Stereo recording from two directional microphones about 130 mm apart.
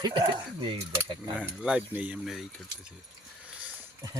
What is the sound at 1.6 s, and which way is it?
Speech, 10° right (ahead or behind).